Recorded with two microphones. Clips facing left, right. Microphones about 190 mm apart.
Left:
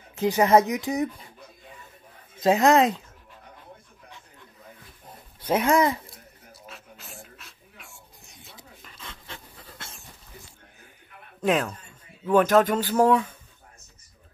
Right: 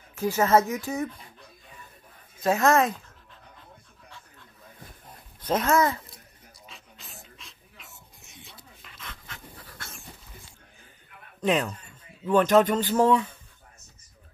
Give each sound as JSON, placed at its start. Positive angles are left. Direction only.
{"t": 0.1, "sound": "speech", "side_deg": 20}
{"t": 2.4, "sound": "speech", "side_deg": 15}
{"t": 5.4, "sound": "speech", "side_deg": 10}
{"t": 6.5, "sound": "dog", "side_deg": 5}
{"t": 7.3, "sound": "a sound", "side_deg": 5}
{"t": 8.8, "sound": "dog", "side_deg": 30}
{"t": 11.4, "sound": "a man's voice", "side_deg": 0}